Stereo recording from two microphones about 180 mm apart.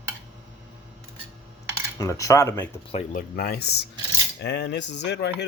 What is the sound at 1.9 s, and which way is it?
Speech, 20° left (ahead or behind).